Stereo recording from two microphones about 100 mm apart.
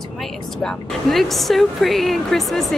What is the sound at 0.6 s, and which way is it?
Speech, centre (ahead or behind).